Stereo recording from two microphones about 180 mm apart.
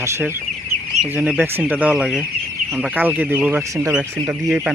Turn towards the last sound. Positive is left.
turn(degrees=-5)  # may be behind; listen again after turning